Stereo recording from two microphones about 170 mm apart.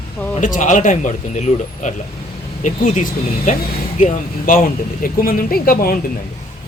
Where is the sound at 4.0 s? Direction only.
50° left (ahead or behind).